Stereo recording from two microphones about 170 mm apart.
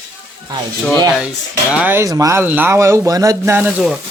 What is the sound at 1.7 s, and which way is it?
Speech, 10° right (ahead or behind).